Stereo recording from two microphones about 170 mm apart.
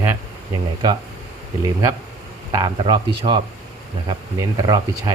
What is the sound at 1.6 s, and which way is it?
Speech, 20° right (ahead or behind).